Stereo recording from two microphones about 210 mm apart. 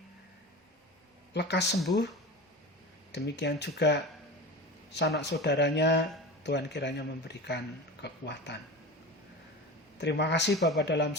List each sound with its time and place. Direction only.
1.3 s speech: 55° left (ahead or behind)
3.1 s speech: 55° left (ahead or behind)
10.0 s speech: 55° left (ahead or behind)